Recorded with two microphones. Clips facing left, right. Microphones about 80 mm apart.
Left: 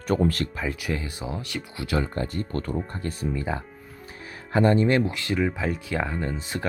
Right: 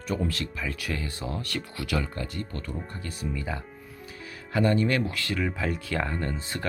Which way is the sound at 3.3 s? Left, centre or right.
Left.